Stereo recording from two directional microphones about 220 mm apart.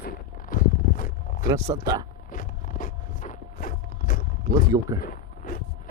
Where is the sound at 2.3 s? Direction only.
35° left (ahead or behind).